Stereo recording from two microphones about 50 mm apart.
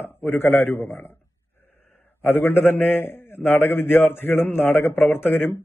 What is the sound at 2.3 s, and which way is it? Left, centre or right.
A man's voice, left.